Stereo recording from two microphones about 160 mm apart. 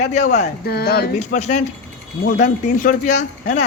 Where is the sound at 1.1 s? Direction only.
50° left (ahead or behind).